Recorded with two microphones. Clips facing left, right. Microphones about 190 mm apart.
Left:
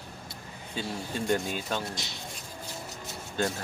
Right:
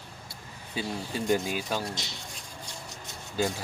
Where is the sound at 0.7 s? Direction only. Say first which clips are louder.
Right 1 dB; 5° right (ahead or behind).